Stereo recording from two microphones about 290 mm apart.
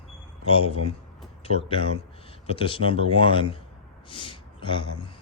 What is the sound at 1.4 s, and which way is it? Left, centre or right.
Speech, centre.